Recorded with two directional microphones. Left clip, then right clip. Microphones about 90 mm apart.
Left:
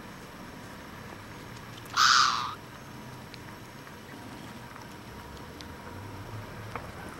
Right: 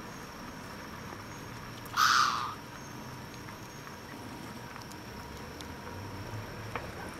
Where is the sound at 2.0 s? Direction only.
20° left (ahead or behind).